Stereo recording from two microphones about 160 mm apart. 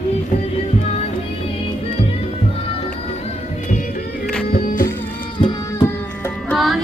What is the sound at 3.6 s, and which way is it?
Music, 55° left (ahead or behind).